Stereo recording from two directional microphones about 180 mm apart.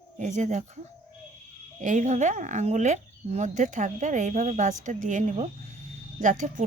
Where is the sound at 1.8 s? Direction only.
45° right (ahead or behind).